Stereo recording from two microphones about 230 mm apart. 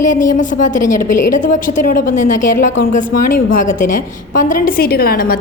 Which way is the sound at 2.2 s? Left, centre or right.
Left.